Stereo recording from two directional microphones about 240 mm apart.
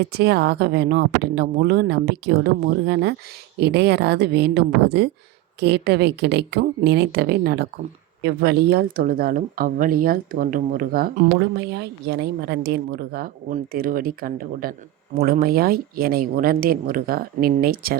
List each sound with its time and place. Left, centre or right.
0.0 s speech: right